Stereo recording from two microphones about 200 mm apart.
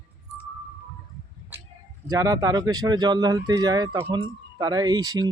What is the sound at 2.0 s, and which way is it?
Speech, 15° right (ahead or behind).